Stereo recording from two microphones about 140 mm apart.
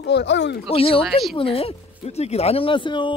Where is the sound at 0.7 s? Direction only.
40° left (ahead or behind).